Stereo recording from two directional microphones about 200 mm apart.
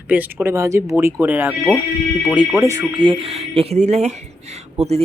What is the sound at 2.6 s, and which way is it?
Speech, 20° right (ahead or behind).